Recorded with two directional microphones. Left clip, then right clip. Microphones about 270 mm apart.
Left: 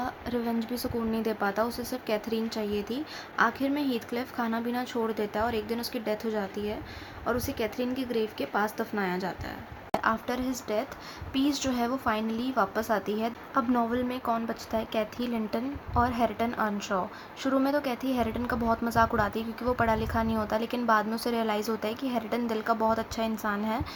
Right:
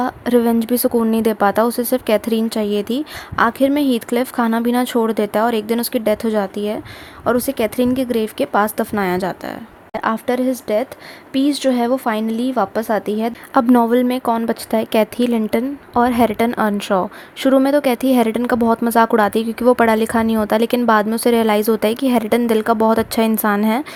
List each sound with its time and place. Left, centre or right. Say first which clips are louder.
0.0 s a woman's voice: right 16 dB; right